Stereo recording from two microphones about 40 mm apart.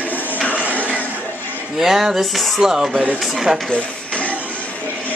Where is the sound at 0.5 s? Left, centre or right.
Right.